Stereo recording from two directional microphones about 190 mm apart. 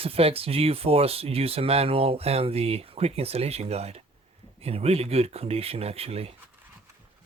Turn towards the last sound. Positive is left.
turn(degrees=-30)  # may be behind; listen again after turning